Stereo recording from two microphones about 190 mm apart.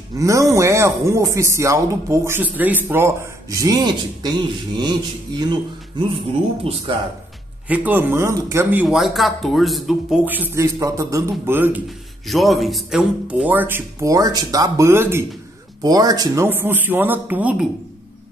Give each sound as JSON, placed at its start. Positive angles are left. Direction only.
{"t": 0.2, "sound": "speech", "side_deg": -15}
{"t": 7.6, "sound": "speech", "side_deg": -10}
{"t": 12.3, "sound": "speech", "side_deg": 0}